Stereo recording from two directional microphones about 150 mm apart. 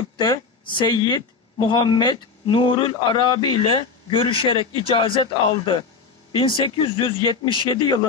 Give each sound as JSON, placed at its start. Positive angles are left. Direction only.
{"t": 0.2, "sound": "speech", "side_deg": 30}